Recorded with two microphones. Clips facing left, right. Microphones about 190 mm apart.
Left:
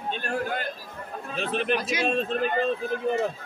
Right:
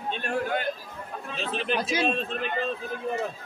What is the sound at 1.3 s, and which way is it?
Speech, 55° left (ahead or behind).